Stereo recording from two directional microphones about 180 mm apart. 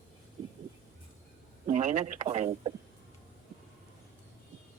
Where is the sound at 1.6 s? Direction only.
40° right (ahead or behind).